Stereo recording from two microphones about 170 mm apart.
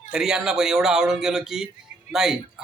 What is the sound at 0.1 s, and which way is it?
Speech, 5° right (ahead or behind).